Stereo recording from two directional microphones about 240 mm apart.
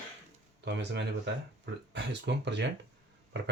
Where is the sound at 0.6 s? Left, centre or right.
Right.